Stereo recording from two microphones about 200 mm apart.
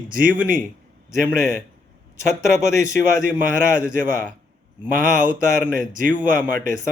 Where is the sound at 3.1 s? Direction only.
45° right (ahead or behind).